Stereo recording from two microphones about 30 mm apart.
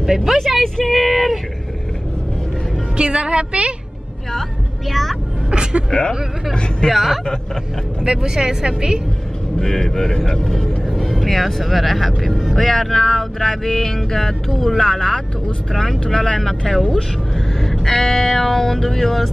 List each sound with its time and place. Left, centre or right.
0.0 s a woman's voice: centre
0.8 s speech: centre
3.0 s a woman's voice: right
4.8 s speech: centre
5.5 s speech: right
5.9 s speech: left
6.9 s speech: centre
8.0 s speech: right
9.6 s speech: centre
11.2 s speech: centre